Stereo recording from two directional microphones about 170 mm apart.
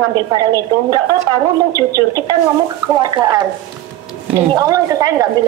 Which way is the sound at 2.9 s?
25° right (ahead or behind).